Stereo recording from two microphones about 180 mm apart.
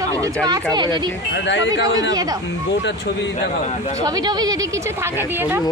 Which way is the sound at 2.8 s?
80° left.